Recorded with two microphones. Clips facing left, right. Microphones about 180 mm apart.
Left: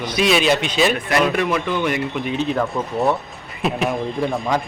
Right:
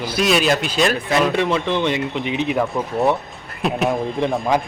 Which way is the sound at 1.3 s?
25° right (ahead or behind).